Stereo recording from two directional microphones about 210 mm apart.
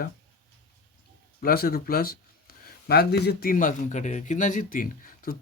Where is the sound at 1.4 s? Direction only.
45° left (ahead or behind).